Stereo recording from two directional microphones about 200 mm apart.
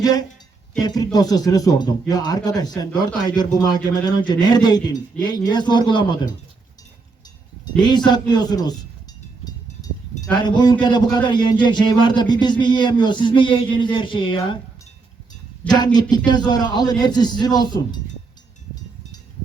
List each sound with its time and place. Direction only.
0.0 s speech: 20° left (ahead or behind)
7.8 s speech: 20° left (ahead or behind)
10.4 s speech: 20° left (ahead or behind)
15.7 s speech: 20° left (ahead or behind)